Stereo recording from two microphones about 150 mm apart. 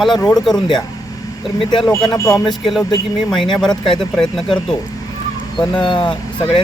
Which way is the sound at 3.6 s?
30° left (ahead or behind).